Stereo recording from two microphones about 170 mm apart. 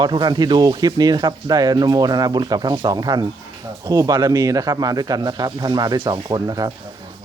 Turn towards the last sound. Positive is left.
turn(degrees=-20)  # may be behind; listen again after turning